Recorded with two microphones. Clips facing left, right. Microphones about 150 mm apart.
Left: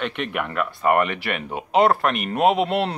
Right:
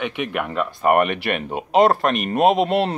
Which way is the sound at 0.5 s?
25° right (ahead or behind).